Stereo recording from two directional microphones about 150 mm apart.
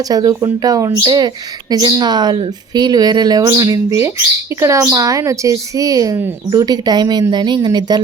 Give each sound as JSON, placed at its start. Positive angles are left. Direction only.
{"t": 0.0, "sound": "speech", "side_deg": -25}